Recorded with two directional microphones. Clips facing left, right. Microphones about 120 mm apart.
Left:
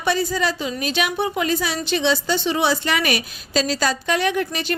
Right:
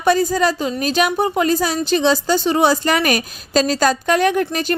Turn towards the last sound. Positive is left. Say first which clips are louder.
# right 5 dB
turn(degrees=-45)  # may be behind; listen again after turning